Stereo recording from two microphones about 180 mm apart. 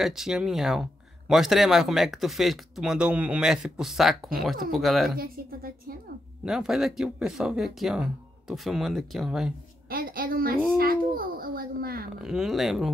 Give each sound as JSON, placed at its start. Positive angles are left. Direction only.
{"t": 0.0, "sound": "speech", "side_deg": 0}
{"t": 5.2, "sound": "a child's voice", "side_deg": -55}
{"t": 6.4, "sound": "speech", "side_deg": -5}
{"t": 9.8, "sound": "a woman's voice", "side_deg": -55}
{"t": 12.2, "sound": "speech", "side_deg": -5}